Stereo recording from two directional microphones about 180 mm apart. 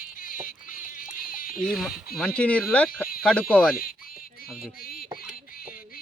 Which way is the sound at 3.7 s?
55° left (ahead or behind).